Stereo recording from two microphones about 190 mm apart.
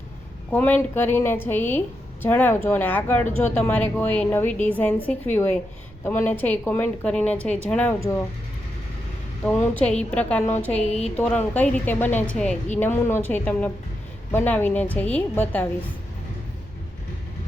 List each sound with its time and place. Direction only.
0.5 s speech: 10° left (ahead or behind)
6.1 s speech: 10° left (ahead or behind)
9.4 s speech: 10° left (ahead or behind)
10.8 s a sound: 35° left (ahead or behind)
11.2 s a woman's voice: 10° left (ahead or behind)